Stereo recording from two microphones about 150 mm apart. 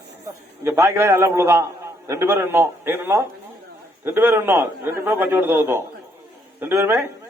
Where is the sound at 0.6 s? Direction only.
20° right (ahead or behind).